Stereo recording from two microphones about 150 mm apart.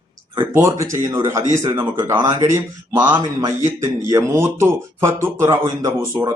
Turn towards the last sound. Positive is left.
turn(degrees=-20)  # may be behind; listen again after turning